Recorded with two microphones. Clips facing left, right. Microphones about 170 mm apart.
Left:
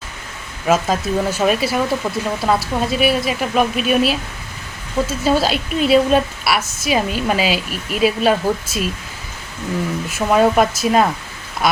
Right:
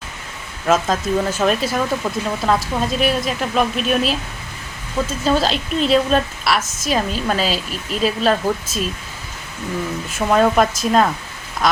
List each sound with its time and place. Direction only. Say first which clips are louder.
0.7 s speech: even; 5° left (ahead or behind)
5.2 s speech: left 1 dB; 10° left (ahead or behind)
10.1 s speech: left 1 dB; 5° left (ahead or behind)